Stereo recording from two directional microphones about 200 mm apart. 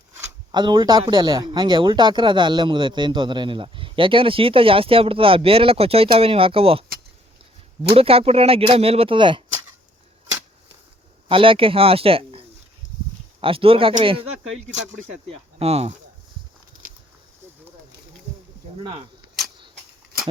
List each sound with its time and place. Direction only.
0.5 s a man's voice: 25° right (ahead or behind)
7.9 s a man's voice: 30° right (ahead or behind)
11.3 s a man's voice: 25° right (ahead or behind)
13.4 s a man's voice: 25° right (ahead or behind)
18.8 s a man's voice: 25° right (ahead or behind)